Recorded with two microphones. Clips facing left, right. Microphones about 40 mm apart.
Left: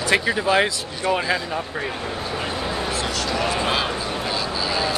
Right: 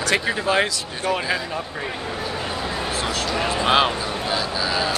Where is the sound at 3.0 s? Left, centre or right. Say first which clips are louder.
Right 1 dB; right.